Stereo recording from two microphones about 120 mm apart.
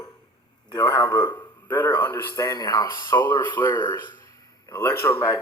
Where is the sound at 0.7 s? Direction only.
35° left (ahead or behind).